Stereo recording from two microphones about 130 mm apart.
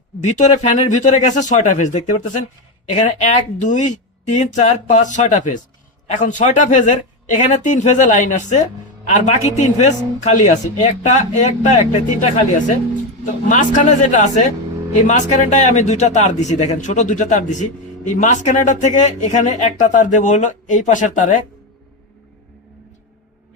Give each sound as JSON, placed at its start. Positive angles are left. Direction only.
{"t": 0.2, "sound": "a man's voice", "side_deg": 65}